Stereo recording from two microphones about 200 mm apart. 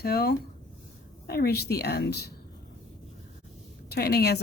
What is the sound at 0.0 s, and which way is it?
Speech, 50° left (ahead or behind).